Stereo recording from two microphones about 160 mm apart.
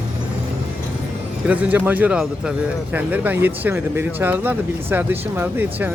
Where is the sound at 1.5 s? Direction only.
10° right (ahead or behind).